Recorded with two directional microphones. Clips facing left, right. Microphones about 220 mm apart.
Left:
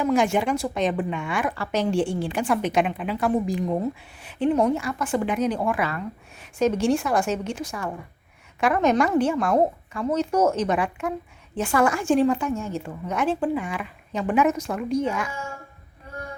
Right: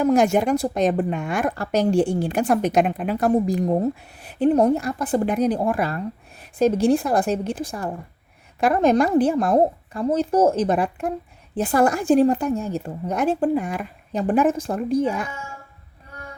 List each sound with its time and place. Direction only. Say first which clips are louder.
0.0 s a woman's voice: right 4 dB; 40° right (ahead or behind)
8.6 s a woman's voice: right 3 dB; 35° right (ahead or behind)